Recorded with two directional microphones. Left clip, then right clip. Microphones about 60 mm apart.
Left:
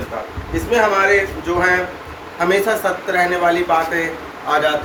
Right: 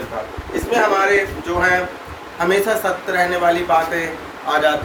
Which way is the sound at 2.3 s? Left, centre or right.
Right.